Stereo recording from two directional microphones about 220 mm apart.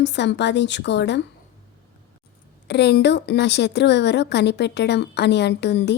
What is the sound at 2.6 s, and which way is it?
A woman's voice, 50° left (ahead or behind).